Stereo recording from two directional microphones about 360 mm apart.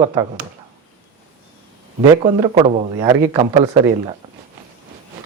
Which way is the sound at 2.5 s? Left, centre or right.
Centre.